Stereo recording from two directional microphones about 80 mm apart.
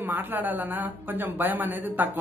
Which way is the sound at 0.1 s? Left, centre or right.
Right.